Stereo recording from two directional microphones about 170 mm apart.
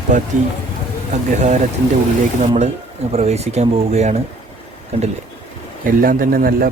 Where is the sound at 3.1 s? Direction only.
40° right (ahead or behind).